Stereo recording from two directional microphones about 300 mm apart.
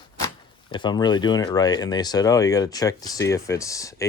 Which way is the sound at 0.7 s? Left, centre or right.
Centre.